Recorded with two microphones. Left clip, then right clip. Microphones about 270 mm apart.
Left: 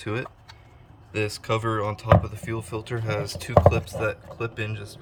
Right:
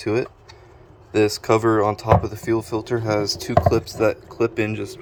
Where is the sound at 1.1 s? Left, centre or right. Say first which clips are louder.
Right 9 dB; centre.